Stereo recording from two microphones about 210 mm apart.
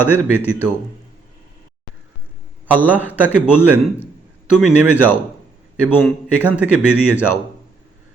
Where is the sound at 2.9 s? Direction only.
10° right (ahead or behind).